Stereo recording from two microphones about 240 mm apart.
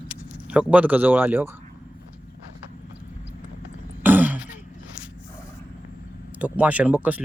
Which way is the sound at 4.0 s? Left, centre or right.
Centre.